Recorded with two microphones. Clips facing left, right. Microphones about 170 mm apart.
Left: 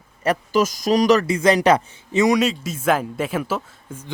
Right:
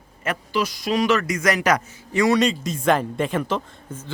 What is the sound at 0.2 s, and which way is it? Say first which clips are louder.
Speech: left 5 dB; 40° left (ahead or behind).